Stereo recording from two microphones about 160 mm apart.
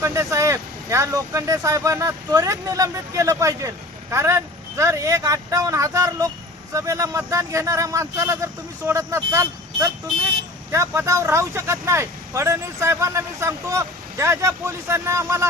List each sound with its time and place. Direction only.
0.0 s speech: 20° right (ahead or behind)